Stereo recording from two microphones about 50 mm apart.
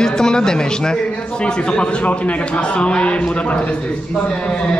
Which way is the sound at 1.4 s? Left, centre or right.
Left.